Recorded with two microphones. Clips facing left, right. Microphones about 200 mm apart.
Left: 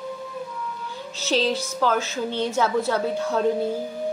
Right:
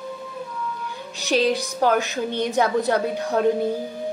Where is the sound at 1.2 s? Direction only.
15° right (ahead or behind).